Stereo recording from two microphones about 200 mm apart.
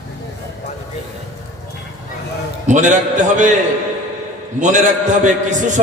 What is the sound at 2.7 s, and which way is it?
Speech, 40° right (ahead or behind).